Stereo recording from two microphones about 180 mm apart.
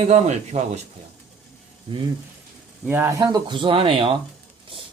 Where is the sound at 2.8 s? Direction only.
10° right (ahead or behind).